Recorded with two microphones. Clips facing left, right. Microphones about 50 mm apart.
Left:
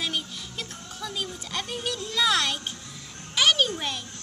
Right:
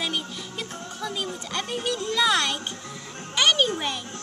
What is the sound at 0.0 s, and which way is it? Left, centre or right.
Music, centre.